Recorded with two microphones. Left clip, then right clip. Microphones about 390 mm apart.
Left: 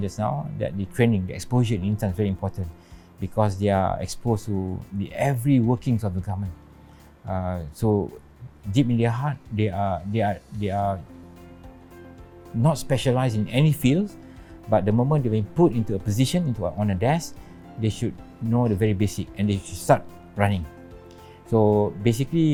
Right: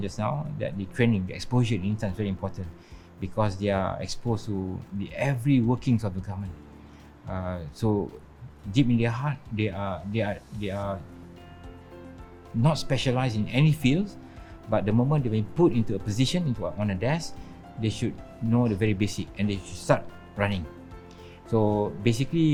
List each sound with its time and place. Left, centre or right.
0.0 s speech: left
1.5 s speech: left
7.3 s speech: left
12.6 s speech: left
17.7 s speech: left
21.5 s speech: left